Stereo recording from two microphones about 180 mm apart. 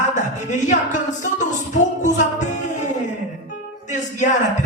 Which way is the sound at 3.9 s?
45° left (ahead or behind).